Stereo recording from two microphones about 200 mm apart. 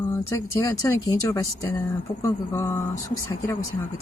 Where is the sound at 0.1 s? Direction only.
15° left (ahead or behind).